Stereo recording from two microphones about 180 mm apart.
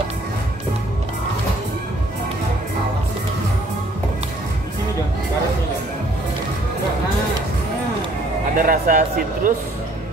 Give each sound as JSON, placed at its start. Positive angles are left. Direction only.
{"t": 8.5, "sound": "speech", "side_deg": -50}